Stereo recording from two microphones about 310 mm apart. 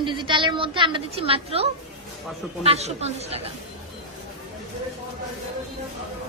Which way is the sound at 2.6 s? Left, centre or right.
Right.